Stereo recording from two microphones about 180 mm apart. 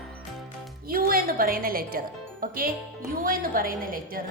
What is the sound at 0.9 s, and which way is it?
A woman's voice, 55° right (ahead or behind).